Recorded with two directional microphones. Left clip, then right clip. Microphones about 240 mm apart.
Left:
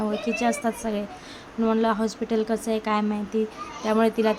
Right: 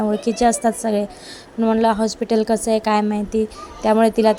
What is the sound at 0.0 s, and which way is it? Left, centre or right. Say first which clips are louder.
A woman's voice: right 7 dB; right.